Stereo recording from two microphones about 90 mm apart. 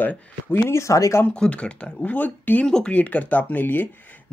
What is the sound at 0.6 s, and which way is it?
Speech, 35° left (ahead or behind).